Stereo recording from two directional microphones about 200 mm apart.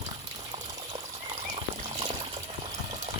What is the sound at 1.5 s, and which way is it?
Water, 30° right (ahead or behind).